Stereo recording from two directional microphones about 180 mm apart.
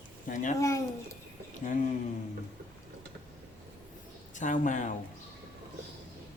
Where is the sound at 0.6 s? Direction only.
15° left (ahead or behind).